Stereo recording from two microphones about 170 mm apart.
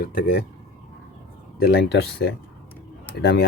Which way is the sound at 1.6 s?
75° left (ahead or behind).